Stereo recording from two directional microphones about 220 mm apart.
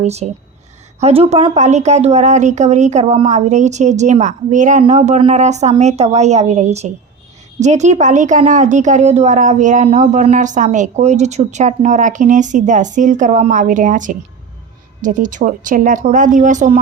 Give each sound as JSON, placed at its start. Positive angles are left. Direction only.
{"t": 0.0, "sound": "a woman's voice", "side_deg": -30}